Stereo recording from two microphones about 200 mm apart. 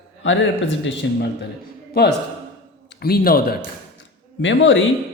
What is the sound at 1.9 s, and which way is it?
A man's voice, 50° left (ahead or behind).